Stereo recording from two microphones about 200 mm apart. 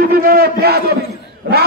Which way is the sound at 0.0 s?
45° right (ahead or behind).